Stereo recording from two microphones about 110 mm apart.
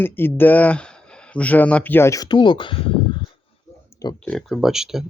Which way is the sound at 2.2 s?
45° left (ahead or behind).